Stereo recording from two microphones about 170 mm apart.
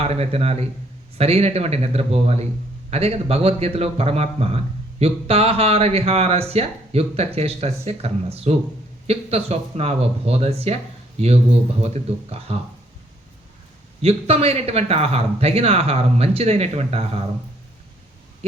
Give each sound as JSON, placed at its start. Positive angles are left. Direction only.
{"t": 0.0, "sound": "speech", "side_deg": -35}
{"t": 11.8, "sound": "speech", "side_deg": -35}
{"t": 14.0, "sound": "speech", "side_deg": -35}